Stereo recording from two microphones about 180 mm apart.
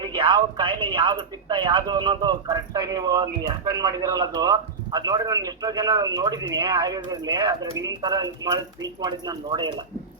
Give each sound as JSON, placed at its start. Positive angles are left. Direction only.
{"t": 0.0, "sound": "a man's voice", "side_deg": -25}